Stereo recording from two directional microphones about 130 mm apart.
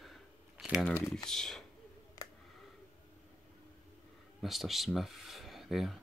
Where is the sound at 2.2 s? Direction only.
30° left (ahead or behind).